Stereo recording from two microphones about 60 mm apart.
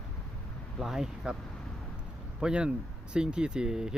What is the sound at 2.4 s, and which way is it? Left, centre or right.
Speech, centre.